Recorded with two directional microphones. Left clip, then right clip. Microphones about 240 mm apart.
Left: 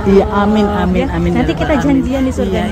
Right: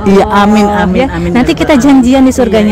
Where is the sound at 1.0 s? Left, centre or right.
Right.